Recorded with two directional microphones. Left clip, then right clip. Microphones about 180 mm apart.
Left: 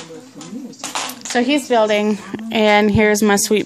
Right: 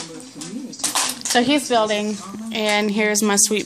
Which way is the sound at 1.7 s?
35° left (ahead or behind).